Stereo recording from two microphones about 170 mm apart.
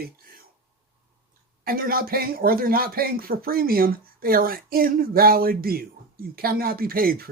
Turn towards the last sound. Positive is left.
turn(degrees=-60)  # may be behind; listen again after turning